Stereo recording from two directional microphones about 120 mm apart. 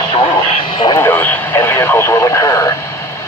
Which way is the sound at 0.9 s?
15° left (ahead or behind).